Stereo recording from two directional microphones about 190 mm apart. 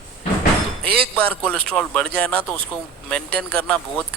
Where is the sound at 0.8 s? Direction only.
55° right (ahead or behind).